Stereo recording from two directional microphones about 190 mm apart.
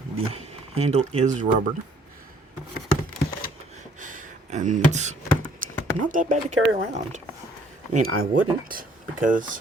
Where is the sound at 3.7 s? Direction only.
40° right (ahead or behind).